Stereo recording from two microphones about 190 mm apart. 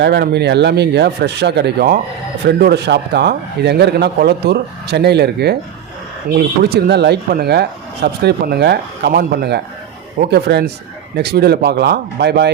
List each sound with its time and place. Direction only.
0.0 s speech: 60° right (ahead or behind)